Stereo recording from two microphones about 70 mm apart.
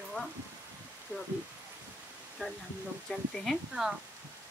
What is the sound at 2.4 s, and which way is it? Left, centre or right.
Speech, left.